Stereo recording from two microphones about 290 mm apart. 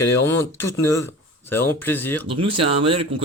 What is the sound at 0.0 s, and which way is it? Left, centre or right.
Speech, centre.